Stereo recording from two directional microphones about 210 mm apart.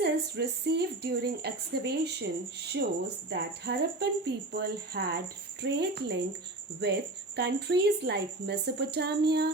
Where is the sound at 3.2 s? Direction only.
55° right (ahead or behind).